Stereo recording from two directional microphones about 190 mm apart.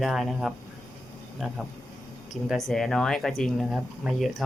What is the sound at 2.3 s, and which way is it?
Speech, centre (ahead or behind).